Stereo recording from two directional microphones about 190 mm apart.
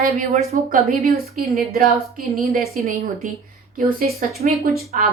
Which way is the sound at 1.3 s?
50° right (ahead or behind).